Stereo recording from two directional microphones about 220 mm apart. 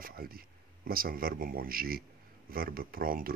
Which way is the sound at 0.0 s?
40° right (ahead or behind).